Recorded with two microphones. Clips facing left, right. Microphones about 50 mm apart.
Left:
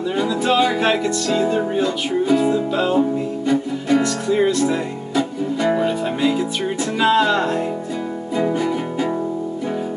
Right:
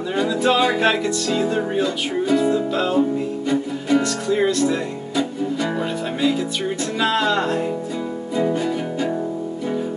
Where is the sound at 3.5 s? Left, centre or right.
Centre.